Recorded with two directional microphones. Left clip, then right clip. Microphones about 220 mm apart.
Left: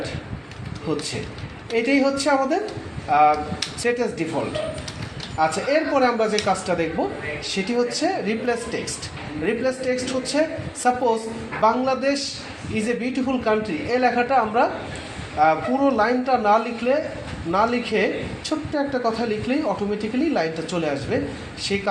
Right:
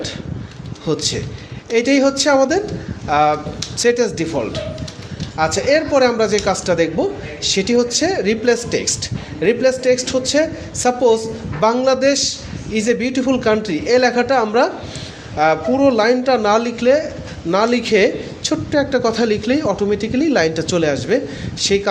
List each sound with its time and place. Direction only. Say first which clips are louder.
1.7 s speech: right 5 dB; 50° right (ahead or behind)
5.4 s speech: right 5 dB; 50° right (ahead or behind)